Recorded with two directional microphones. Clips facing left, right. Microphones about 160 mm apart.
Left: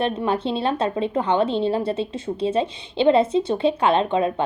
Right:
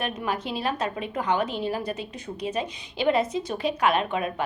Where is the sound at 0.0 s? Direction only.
30° left (ahead or behind).